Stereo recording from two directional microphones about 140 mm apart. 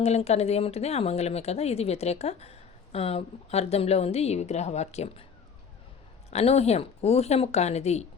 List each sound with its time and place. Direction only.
0.0 s speech: 50° left (ahead or behind)
6.3 s speech: 45° left (ahead or behind)